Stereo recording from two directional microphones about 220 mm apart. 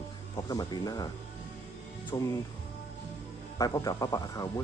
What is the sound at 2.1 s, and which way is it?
Speech, 15° left (ahead or behind).